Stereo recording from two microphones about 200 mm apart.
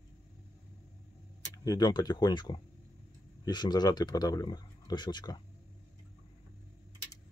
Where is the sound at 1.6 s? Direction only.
20° left (ahead or behind).